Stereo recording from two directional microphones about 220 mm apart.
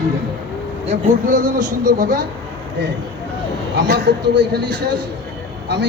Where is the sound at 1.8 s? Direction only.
45° right (ahead or behind).